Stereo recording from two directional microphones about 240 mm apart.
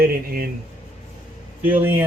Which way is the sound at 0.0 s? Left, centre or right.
Right.